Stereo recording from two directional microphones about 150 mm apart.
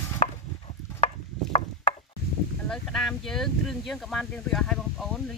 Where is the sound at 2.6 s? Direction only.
5° left (ahead or behind).